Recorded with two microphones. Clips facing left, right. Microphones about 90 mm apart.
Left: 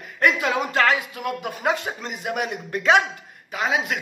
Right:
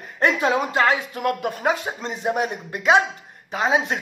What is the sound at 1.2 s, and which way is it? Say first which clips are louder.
Speech: right 5 dB; 40° right (ahead or behind).